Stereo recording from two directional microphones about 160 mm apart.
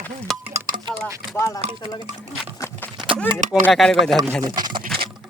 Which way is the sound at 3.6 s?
5° left (ahead or behind).